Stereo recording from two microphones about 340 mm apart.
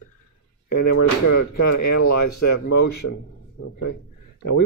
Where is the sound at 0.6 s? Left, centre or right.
Left.